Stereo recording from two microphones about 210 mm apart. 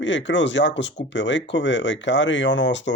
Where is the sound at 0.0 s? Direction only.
60° left (ahead or behind).